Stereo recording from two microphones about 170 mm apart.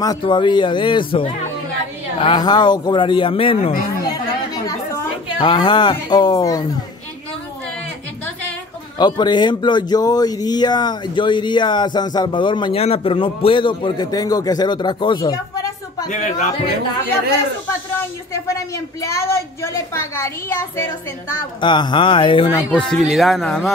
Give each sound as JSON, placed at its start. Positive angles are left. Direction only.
{"t": 0.0, "sound": "a woman's voice", "side_deg": 25}
{"t": 8.9, "sound": "speech", "side_deg": 25}
{"t": 16.1, "sound": "speech", "side_deg": 45}
{"t": 19.0, "sound": "a woman's voice", "side_deg": 15}
{"t": 21.5, "sound": "speech", "side_deg": 25}
{"t": 22.5, "sound": "a woman's voice", "side_deg": 15}
{"t": 22.8, "sound": "speech", "side_deg": 5}